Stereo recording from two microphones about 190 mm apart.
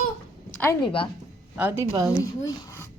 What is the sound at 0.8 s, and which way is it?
Child singing, 25° left (ahead or behind).